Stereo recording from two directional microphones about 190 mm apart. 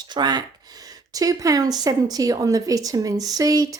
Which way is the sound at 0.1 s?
20° right (ahead or behind).